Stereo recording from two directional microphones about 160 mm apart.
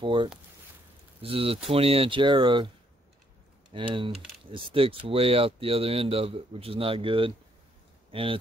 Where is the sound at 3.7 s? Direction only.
30° right (ahead or behind).